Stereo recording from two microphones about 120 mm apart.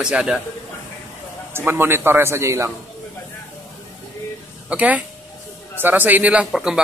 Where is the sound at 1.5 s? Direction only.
20° right (ahead or behind).